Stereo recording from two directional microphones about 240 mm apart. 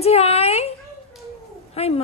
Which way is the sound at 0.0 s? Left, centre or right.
Left.